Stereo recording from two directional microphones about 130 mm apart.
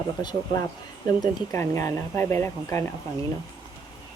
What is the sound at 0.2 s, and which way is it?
Speech, 35° left (ahead or behind).